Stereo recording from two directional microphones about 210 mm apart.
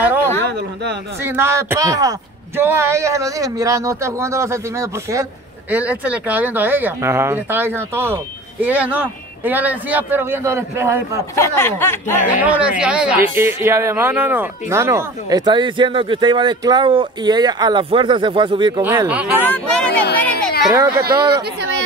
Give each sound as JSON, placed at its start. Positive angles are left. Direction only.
{"t": 0.0, "sound": "a sound", "side_deg": -10}
{"t": 1.2, "sound": "speech", "side_deg": -10}
{"t": 11.3, "sound": "speech", "side_deg": 10}
{"t": 12.4, "sound": "speech", "side_deg": -5}
{"t": 18.8, "sound": "speech", "side_deg": -10}
{"t": 19.3, "sound": "speech", "side_deg": 10}
{"t": 20.7, "sound": "speech", "side_deg": -15}